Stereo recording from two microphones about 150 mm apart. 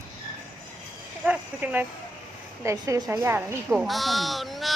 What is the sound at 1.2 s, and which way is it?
A woman's voice, 10° right (ahead or behind).